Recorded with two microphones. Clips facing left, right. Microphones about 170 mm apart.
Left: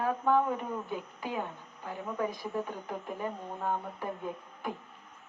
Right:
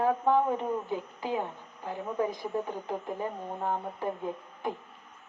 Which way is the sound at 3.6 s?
20° right (ahead or behind).